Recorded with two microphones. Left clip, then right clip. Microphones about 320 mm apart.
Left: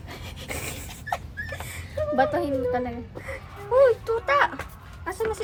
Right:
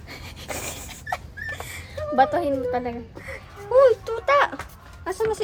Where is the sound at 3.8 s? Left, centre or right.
Right.